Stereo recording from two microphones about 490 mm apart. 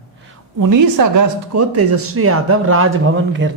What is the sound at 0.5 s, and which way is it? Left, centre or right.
Speech, right.